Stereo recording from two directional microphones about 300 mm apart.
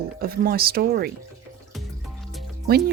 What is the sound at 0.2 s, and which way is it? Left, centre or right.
Speech, right.